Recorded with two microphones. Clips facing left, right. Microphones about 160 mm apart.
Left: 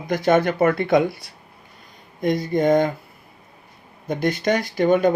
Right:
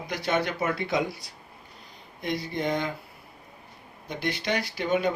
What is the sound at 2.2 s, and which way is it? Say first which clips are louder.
Speech: left 10 dB; 45° left (ahead or behind).